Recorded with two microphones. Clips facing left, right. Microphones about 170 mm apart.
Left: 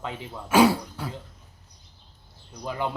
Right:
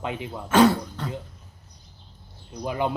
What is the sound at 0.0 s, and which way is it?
Speech, 15° right (ahead or behind).